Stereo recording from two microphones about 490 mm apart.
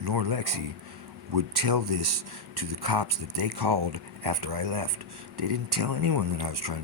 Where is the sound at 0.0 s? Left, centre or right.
Right.